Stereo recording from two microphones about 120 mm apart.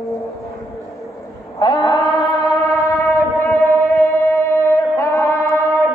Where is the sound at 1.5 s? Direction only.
30° left (ahead or behind).